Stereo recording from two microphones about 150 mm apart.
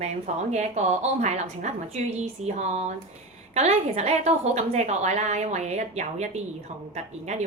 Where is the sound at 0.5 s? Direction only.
50° right (ahead or behind).